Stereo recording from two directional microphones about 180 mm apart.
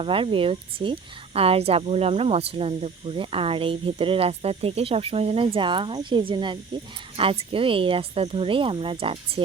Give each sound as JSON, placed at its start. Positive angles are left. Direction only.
{"t": 0.0, "sound": "speech", "side_deg": -30}